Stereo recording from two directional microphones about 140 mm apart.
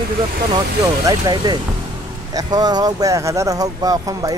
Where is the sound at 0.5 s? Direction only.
30° right (ahead or behind).